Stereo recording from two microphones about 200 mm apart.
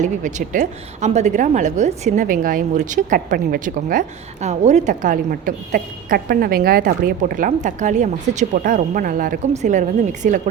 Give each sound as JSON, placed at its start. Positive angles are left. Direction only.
{"t": 0.0, "sound": "a woman's voice", "side_deg": -40}